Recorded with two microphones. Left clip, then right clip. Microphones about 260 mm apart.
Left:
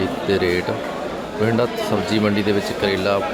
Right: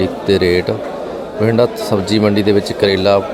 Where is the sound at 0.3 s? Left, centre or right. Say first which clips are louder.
Right 7 dB; right.